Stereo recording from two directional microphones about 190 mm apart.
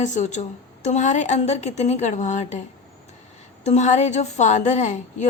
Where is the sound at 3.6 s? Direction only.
35° left (ahead or behind).